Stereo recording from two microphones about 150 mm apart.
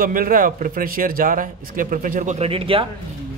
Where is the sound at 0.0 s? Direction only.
70° right (ahead or behind).